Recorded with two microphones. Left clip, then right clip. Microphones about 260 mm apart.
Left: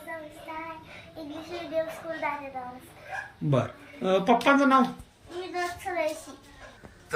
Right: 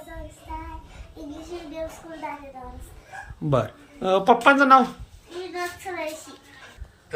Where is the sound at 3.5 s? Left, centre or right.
Centre.